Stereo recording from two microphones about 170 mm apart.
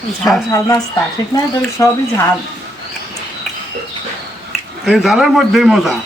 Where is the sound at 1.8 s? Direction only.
20° left (ahead or behind).